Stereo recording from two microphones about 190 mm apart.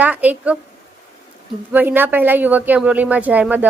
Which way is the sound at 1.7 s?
10° right (ahead or behind).